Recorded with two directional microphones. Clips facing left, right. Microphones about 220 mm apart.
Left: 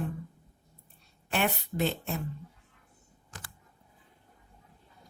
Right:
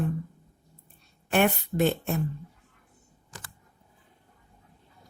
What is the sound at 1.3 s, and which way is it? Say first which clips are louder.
Speech: right 6 dB; 55° right (ahead or behind).